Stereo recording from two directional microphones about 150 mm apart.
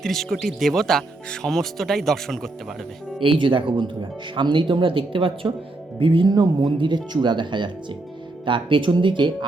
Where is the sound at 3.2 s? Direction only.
35° right (ahead or behind).